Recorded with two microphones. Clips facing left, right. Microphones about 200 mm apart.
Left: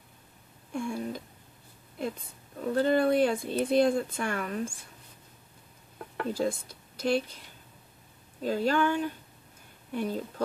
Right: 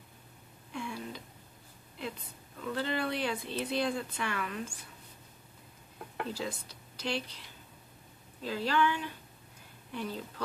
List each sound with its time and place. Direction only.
0.7 s a sound: 50° left (ahead or behind)
2.6 s speech: 45° left (ahead or behind)
6.3 s speech: 45° left (ahead or behind)
8.4 s speech: 45° left (ahead or behind)